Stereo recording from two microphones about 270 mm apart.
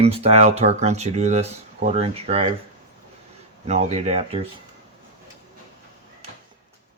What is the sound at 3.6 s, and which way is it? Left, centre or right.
Speech, right.